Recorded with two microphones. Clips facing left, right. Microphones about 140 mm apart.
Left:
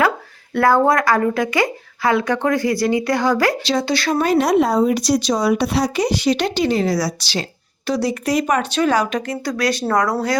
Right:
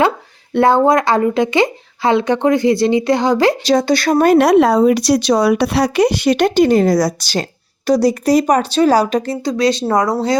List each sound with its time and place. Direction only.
0.5 s speech: 25° right (ahead or behind)
3.6 s speech: 40° right (ahead or behind); by 10.3 s 20° right (ahead or behind)